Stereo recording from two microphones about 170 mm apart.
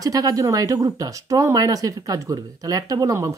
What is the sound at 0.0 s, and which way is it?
Speech, 20° right (ahead or behind).